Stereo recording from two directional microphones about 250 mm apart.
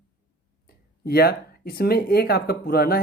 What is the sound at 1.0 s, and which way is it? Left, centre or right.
Speech, left.